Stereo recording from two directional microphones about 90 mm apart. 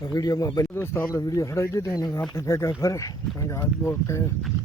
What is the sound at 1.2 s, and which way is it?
Speech, 40° left (ahead or behind).